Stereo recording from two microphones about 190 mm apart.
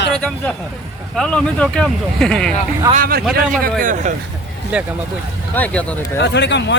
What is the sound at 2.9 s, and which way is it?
Speech, 50° right (ahead or behind).